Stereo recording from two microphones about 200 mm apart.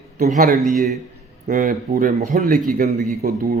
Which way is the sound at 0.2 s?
40° right (ahead or behind).